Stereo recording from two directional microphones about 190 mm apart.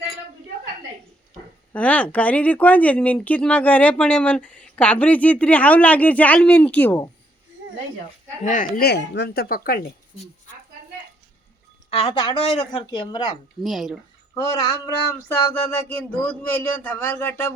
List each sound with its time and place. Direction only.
1.7 s speech: 10° left (ahead or behind)
8.4 s speech: 45° left (ahead or behind)
11.9 s speech: 30° left (ahead or behind)
13.6 s speech: centre (ahead or behind)
14.3 s speech: 20° left (ahead or behind)